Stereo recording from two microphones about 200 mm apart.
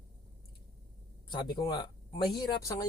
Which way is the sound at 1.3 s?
20° left (ahead or behind).